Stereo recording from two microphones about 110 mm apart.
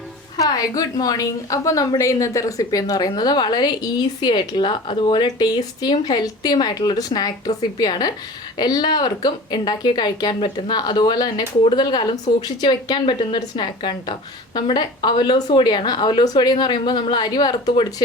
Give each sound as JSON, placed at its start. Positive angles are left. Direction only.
{"t": 0.3, "sound": "a woman's voice", "side_deg": 35}